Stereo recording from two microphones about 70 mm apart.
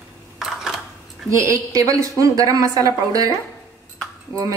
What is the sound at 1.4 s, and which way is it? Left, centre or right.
Speech, right.